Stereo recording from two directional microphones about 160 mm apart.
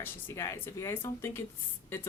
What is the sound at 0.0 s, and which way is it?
Speech, 15° left (ahead or behind).